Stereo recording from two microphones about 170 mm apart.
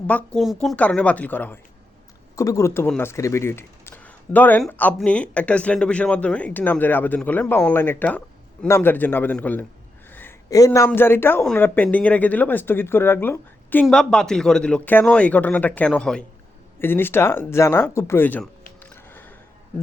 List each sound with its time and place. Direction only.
0.1 s a man's voice: 5° left (ahead or behind)
18.8 s music: 10° left (ahead or behind)